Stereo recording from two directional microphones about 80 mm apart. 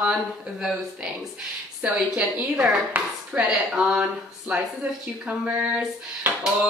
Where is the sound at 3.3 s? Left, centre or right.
Centre.